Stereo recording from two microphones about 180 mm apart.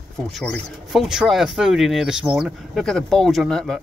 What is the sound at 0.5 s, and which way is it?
Speech, centre (ahead or behind).